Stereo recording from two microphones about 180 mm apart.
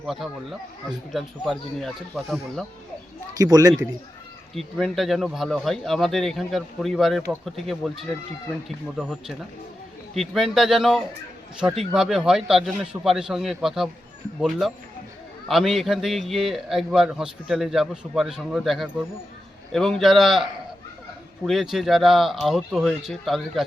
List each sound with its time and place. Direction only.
0.0 s a man's voice: centre (ahead or behind)
3.3 s a man's voice: 20° right (ahead or behind)
4.5 s a man's voice: centre (ahead or behind)
9.0 s a man's voice: centre (ahead or behind)
15.4 s a man's voice: centre (ahead or behind)